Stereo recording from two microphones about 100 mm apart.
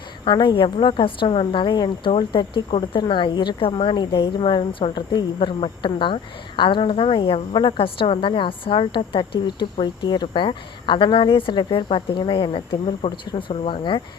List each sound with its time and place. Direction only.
0.3 s a woman's voice: 50° left (ahead or behind); by 3.9 s 65° left (ahead or behind)
3.9 s speech: 45° left (ahead or behind)
4.2 s a woman's voice: 65° left (ahead or behind)